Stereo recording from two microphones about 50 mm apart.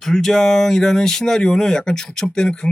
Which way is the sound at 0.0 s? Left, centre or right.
Centre.